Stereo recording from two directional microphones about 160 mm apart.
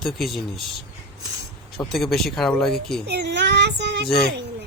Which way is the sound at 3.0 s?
90° right.